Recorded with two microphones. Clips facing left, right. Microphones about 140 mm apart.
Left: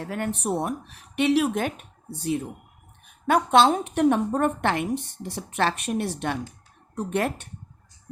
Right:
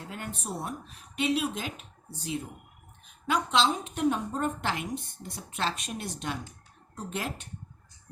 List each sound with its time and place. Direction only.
0.0 s speech: 70° left (ahead or behind)